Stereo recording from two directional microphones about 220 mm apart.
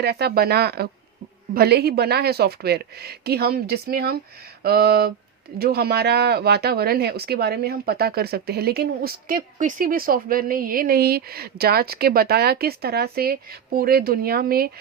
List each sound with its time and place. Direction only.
0.0 s speech: 45° right (ahead or behind)